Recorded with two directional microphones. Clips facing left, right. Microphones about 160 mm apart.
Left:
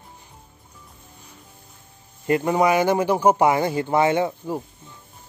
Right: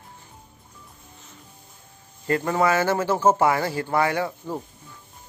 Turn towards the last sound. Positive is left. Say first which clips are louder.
# left 4 dB
turn(degrees=20)  # may be behind; listen again after turning